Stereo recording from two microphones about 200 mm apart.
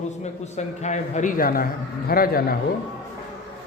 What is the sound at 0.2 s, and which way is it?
A man's voice, 35° left (ahead or behind).